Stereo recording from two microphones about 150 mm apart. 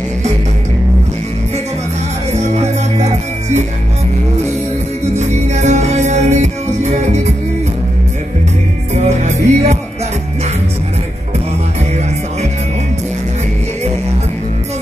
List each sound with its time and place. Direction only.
2.3 s music: 50° right (ahead or behind)
5.1 s music: 50° right (ahead or behind)
8.9 s music: 50° right (ahead or behind)